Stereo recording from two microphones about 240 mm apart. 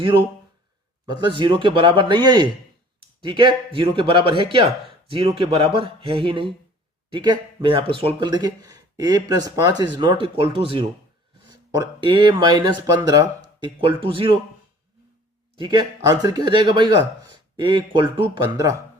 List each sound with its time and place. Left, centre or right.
0.0 s speech: right
15.5 s speech: centre